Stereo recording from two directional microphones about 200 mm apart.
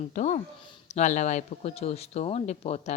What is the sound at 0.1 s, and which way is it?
Speech, 35° left (ahead or behind).